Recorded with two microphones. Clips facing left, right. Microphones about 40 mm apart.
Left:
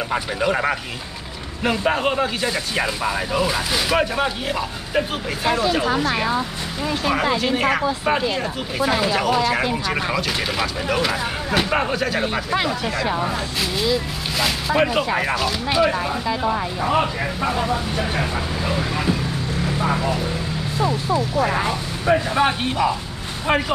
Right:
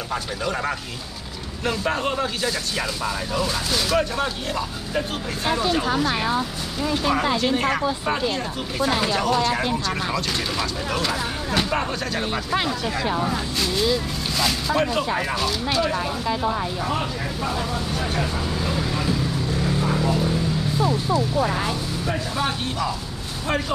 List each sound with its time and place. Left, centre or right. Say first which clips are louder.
0.1 s speech: left 4 dB; left
11.9 s speech: left 4 dB; centre; by 20.1 s left
21.1 s speech: left 2 dB; left